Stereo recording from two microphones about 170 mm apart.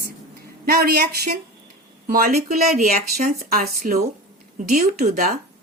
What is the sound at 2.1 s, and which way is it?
A woman's voice, 60° right (ahead or behind).